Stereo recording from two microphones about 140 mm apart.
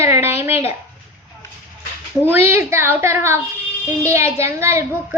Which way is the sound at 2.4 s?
15° right (ahead or behind).